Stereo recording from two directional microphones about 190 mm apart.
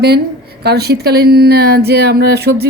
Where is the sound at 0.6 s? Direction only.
55° right (ahead or behind).